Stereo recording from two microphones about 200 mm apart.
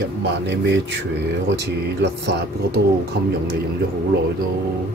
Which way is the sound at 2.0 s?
55° right (ahead or behind).